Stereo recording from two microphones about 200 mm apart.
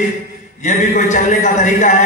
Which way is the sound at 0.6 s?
40° left (ahead or behind).